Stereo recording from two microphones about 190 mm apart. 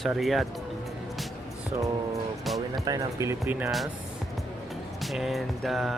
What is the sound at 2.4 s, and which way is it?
Music, centre (ahead or behind).